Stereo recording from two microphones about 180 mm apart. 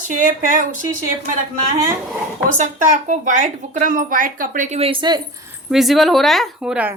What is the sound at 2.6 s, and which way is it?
Speech, 45° right (ahead or behind).